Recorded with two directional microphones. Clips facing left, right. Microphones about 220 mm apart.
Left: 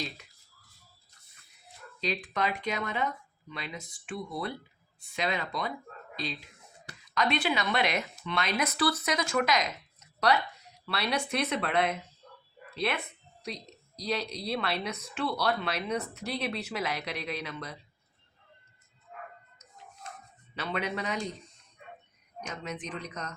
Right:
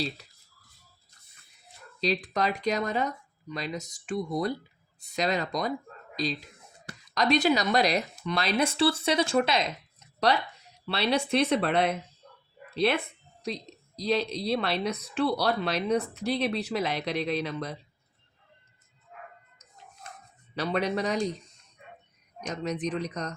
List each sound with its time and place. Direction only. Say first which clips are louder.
2.0 s a woman's voice: right 4 dB; 35° right (ahead or behind)
7.1 s a woman's voice: right 5 dB; 40° right (ahead or behind)
13.4 s a woman's voice: right 5 dB; 30° right (ahead or behind)
20.6 s a woman's voice: right 6 dB; 35° right (ahead or behind)
22.4 s a woman's voice: right 7 dB; 35° right (ahead or behind)